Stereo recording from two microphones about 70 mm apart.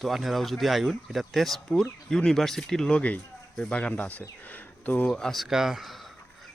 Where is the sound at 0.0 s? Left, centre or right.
Centre; by 5.1 s left.